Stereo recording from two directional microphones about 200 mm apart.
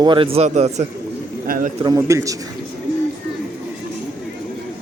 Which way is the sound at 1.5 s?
45° right (ahead or behind).